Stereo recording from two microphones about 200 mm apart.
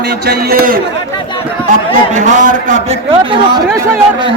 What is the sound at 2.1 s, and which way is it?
A man's voice, 40° right (ahead or behind).